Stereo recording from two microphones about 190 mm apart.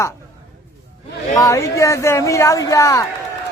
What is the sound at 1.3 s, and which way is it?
Speech, 20° left (ahead or behind).